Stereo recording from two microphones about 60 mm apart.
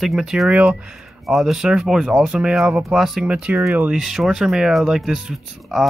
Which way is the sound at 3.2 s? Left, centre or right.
Right.